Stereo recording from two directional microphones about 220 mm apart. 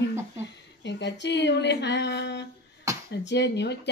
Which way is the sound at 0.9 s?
50° left (ahead or behind).